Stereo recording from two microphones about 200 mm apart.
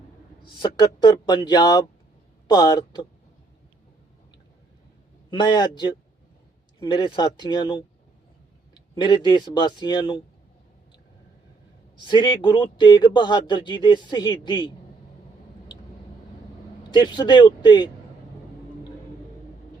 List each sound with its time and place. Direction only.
0.8 s speech: 20° left (ahead or behind)
5.3 s speech: 20° left (ahead or behind)
12.0 s speech: 20° left (ahead or behind)
16.9 s speech: 20° left (ahead or behind)